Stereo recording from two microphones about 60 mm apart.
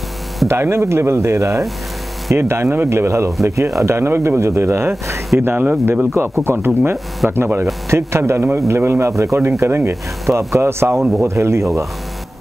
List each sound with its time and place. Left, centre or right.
0.5 s speech: right
5.4 s speech: right